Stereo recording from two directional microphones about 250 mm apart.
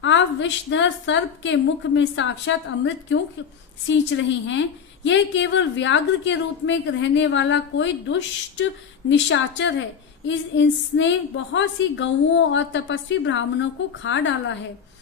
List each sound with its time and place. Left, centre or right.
0.0 s a woman's voice: left